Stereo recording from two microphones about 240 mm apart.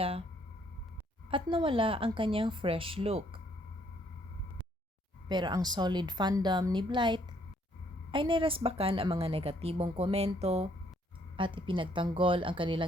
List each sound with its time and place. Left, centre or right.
0.0 s a woman's voice: right
1.3 s a woman's voice: right
5.3 s a woman's voice: centre